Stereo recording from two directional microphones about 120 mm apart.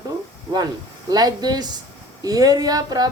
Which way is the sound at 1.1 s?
35° right (ahead or behind).